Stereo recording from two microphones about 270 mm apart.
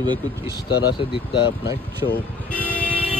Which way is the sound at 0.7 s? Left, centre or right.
Left.